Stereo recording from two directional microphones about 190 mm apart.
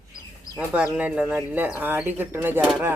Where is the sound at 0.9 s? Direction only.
5° right (ahead or behind).